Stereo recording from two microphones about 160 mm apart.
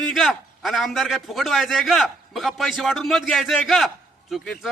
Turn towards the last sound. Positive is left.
turn(degrees=0)  # may be behind; listen again after turning